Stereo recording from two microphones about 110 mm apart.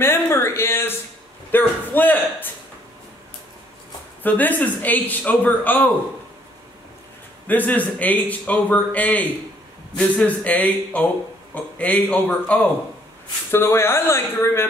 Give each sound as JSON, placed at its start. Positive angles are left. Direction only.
{"t": 0.0, "sound": "speech", "side_deg": 25}
{"t": 4.2, "sound": "speech", "side_deg": 15}
{"t": 7.4, "sound": "speech", "side_deg": 15}
{"t": 13.5, "sound": "speech", "side_deg": 20}